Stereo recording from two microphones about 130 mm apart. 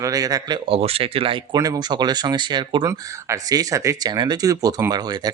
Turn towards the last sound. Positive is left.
turn(degrees=-30)  # may be behind; listen again after turning